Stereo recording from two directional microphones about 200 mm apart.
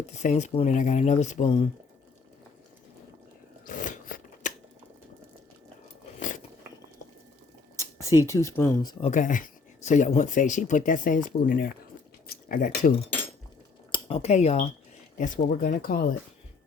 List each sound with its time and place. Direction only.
0.0 s speech: 35° left (ahead or behind)
3.8 s a sound: 40° left (ahead or behind)
6.1 s a sound: 40° left (ahead or behind)
7.8 s speech: 15° left (ahead or behind)
9.0 s speech: 40° left (ahead or behind)
13.9 s speech: 30° left (ahead or behind); by 16.0 s 45° left (ahead or behind)